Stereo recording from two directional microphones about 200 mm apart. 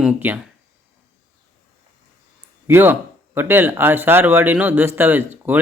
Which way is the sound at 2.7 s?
10° right (ahead or behind).